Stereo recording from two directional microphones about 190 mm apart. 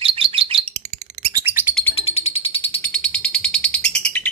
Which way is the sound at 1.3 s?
10° right (ahead or behind).